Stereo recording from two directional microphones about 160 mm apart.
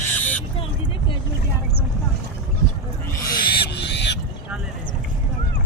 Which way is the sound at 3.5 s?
90° left.